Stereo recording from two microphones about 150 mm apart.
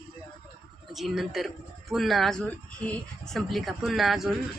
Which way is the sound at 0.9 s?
Centre (ahead or behind).